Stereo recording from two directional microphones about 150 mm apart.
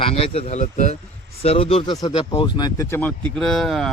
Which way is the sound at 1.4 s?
40° left (ahead or behind).